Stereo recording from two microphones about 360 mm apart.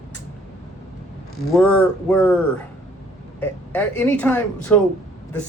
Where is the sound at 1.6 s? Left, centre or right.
Centre.